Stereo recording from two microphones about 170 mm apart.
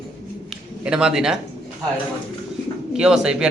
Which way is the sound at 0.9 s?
5° right (ahead or behind).